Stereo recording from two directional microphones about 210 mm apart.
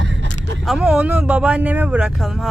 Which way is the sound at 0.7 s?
5° right (ahead or behind).